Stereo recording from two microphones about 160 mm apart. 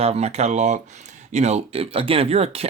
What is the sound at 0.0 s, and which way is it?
Speech, 40° right (ahead or behind).